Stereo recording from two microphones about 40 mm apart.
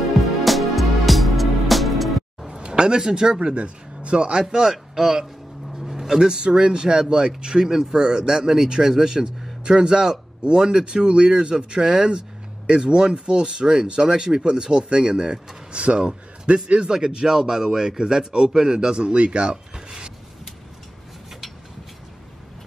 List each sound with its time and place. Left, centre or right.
0.2 s music: centre
2.5 s a sound: right
3.0 s speech: centre
3.3 s speech: right
15.7 s speech: right
16.9 s speech: centre
19.5 s rub: centre